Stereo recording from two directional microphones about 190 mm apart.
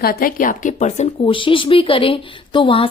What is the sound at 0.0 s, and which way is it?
A woman's voice, 50° left (ahead or behind).